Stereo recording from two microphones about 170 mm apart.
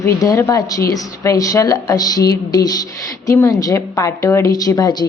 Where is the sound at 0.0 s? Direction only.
20° left (ahead or behind).